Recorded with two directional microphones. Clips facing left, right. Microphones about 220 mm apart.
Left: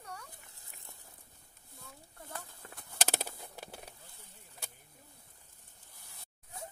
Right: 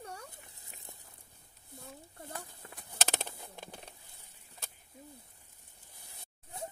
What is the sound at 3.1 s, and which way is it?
Bird, 5° left (ahead or behind).